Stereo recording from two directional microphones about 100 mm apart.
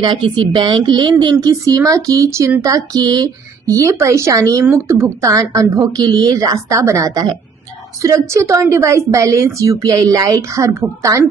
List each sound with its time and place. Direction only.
0.0 s a woman's voice: 55° right (ahead or behind); by 11.2 s 30° right (ahead or behind)